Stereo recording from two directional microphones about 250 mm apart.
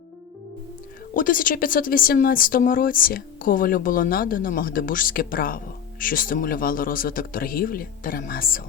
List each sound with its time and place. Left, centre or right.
1.1 s speech: left